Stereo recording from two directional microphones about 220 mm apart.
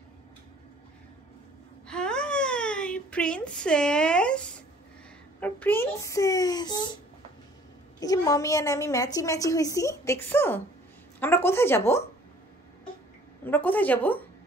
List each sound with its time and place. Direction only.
1.9 s a sound: 5° left (ahead or behind)
5.4 s a woman's voice: 10° left (ahead or behind)
8.0 s a woman's voice: 15° left (ahead or behind)
13.4 s a woman's voice: 10° left (ahead or behind)